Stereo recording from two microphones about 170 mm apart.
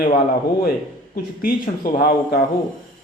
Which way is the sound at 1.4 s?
60° left (ahead or behind).